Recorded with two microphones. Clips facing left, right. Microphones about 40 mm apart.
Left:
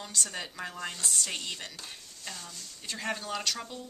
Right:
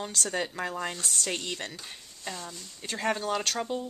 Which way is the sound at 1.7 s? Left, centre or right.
Centre.